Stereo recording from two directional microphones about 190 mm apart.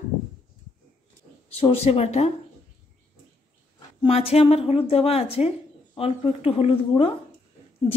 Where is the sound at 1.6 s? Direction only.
30° left (ahead or behind).